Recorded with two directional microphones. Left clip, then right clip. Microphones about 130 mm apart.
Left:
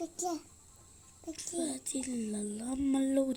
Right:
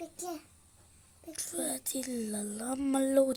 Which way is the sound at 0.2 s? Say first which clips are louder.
Left 5 dB; 20° left (ahead or behind).